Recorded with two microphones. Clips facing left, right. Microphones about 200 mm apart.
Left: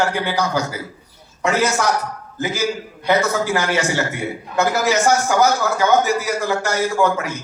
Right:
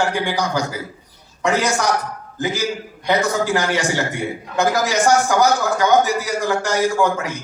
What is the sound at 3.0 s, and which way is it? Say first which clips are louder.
A man's voice: left 1 dB; 15° right (ahead or behind).